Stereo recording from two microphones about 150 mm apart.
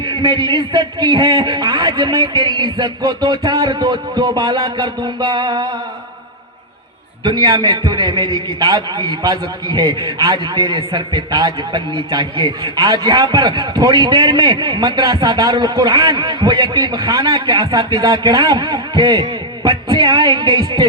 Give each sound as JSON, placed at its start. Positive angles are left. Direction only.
{"t": 0.1, "sound": "a man's voice", "side_deg": -30}
{"t": 7.3, "sound": "a man's voice", "side_deg": -30}